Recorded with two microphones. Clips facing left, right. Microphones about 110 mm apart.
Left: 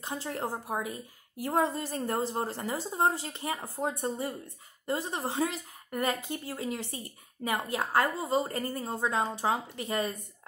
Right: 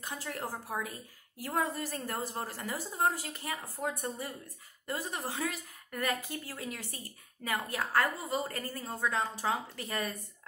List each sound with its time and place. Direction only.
0.0 s a woman's voice: 30° left (ahead or behind)